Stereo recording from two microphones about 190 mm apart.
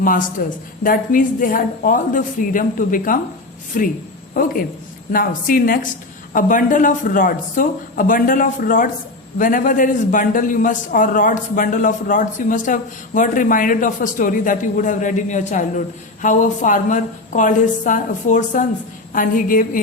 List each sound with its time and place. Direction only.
0.0 s a man's voice: 45° left (ahead or behind)